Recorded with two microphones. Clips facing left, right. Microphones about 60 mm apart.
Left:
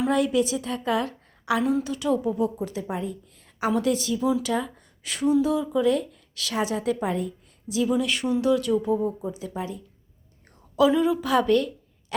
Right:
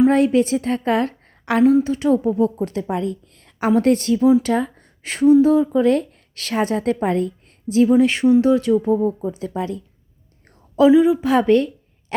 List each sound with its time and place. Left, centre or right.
0.1 s a woman's voice: right
1.6 s speech: right
2.6 s a woman's voice: right
3.7 s a woman's voice: right
9.6 s speech: right
10.9 s a woman's voice: centre
11.2 s a woman's voice: right